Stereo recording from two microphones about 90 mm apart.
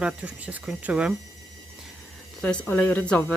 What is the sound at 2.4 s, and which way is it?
Speech, 15° left (ahead or behind).